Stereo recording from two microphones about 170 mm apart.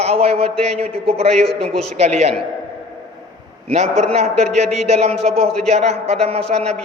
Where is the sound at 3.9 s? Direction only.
5° left (ahead or behind).